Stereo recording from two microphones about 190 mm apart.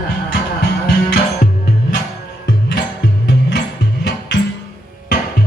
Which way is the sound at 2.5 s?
60° left (ahead or behind).